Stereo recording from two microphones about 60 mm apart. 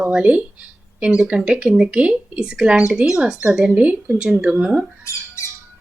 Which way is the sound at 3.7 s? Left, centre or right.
Right.